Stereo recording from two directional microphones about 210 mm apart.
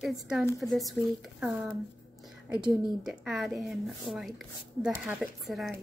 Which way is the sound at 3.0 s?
Centre (ahead or behind).